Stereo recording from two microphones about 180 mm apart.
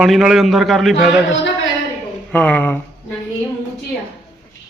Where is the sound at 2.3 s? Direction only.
10° left (ahead or behind).